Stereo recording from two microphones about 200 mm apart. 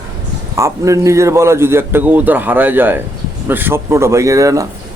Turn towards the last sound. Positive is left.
turn(degrees=-15)  # may be behind; listen again after turning